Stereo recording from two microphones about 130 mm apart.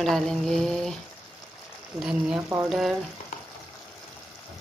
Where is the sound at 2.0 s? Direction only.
5° right (ahead or behind).